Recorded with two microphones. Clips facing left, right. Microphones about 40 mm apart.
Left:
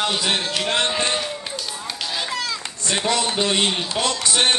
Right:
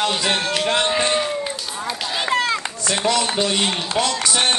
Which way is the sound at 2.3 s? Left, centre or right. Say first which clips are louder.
Right 7 dB; right.